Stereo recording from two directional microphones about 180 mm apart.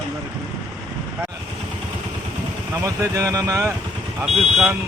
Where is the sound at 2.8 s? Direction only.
15° right (ahead or behind).